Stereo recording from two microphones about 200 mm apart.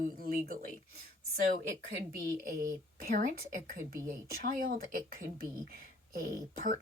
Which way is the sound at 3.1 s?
40° right (ahead or behind).